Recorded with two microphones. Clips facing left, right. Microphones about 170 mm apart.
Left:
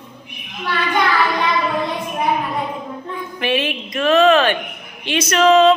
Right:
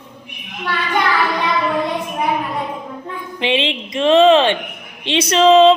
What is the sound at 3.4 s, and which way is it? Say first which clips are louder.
A woman's voice: right 2 dB; 20° right (ahead or behind).